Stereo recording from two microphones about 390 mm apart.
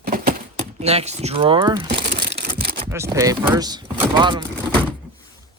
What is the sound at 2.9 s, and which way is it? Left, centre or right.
Speech, centre.